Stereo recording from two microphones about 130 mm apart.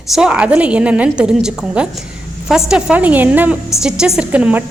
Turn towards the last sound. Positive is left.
turn(degrees=-10)  # may be behind; listen again after turning